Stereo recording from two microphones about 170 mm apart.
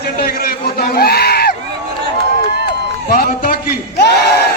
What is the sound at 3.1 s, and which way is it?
Speech, 60° left (ahead or behind).